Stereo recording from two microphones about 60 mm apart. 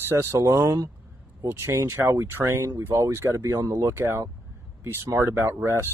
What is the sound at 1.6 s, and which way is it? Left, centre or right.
Speech, right.